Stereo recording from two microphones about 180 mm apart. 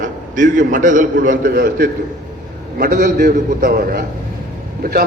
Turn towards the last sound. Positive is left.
turn(degrees=-55)  # may be behind; listen again after turning